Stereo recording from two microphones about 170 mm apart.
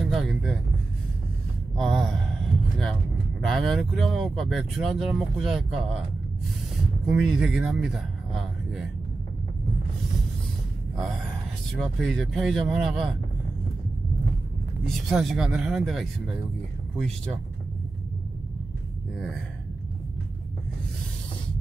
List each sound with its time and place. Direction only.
0.0 s a sound: centre (ahead or behind)
1.8 s gasp: centre (ahead or behind)
2.8 s speech: 5° left (ahead or behind)
7.1 s speech: centre (ahead or behind)
11.8 s speech: centre (ahead or behind)
15.0 s speech: centre (ahead or behind)